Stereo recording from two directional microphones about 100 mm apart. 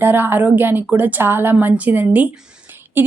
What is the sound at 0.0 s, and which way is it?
A woman's voice, 20° right (ahead or behind).